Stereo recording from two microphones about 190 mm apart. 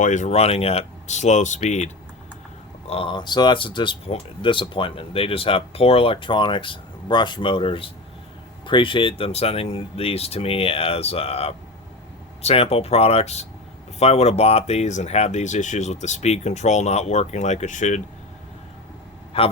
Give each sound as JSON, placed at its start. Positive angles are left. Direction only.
{"t": 0.0, "sound": "speech", "side_deg": 40}
{"t": 19.3, "sound": "speech", "side_deg": 30}